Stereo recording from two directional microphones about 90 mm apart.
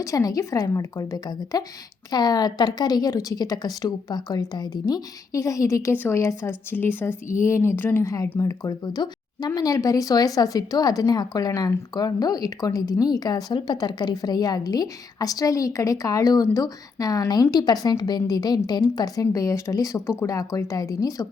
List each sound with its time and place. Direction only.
0.0 s a woman's voice: 40° left (ahead or behind)
5.9 s speech: 20° left (ahead or behind)
8.0 s a woman's voice: 35° left (ahead or behind)